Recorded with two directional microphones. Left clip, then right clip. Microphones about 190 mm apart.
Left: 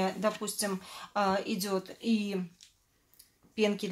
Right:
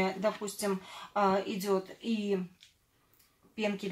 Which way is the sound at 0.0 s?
45° left (ahead or behind).